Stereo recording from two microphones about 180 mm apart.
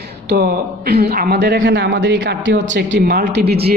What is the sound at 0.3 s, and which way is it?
A woman's voice, 60° right (ahead or behind).